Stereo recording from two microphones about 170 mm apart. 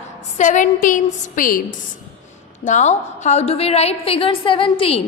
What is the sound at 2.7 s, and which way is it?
A woman's voice, 45° left (ahead or behind).